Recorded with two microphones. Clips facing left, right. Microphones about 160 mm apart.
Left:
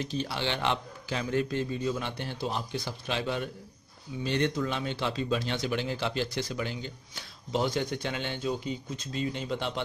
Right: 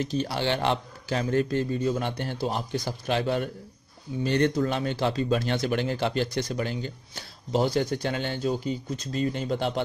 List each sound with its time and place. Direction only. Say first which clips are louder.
0.0 s speech: right 5 dB; 45° right (ahead or behind)